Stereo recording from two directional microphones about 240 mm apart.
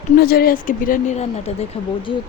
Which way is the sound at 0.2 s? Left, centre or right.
Left.